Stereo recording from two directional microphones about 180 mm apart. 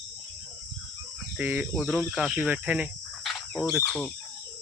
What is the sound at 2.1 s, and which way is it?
Cricket, 5° right (ahead or behind).